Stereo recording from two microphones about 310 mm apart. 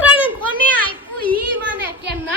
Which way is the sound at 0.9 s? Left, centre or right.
Centre.